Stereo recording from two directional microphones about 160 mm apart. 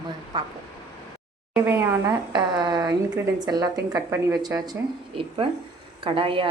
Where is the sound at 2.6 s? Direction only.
25° right (ahead or behind).